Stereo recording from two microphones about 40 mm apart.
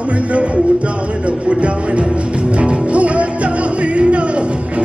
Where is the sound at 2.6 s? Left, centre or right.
Right.